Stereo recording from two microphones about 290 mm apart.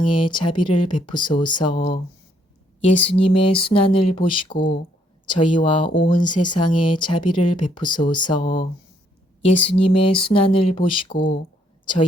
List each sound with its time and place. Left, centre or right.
0.0 s speech: centre
3.2 s a sound: centre
5.2 s speech: centre